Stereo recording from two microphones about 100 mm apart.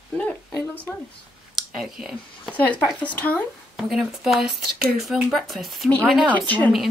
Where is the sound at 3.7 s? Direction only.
5° right (ahead or behind).